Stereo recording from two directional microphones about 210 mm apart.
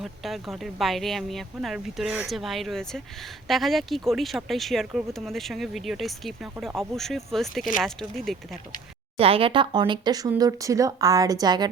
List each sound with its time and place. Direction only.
0.0 s speech: centre (ahead or behind)
9.1 s speech: 25° right (ahead or behind)